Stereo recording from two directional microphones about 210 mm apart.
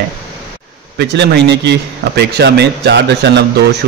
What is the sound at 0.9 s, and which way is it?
Speech, 55° right (ahead or behind).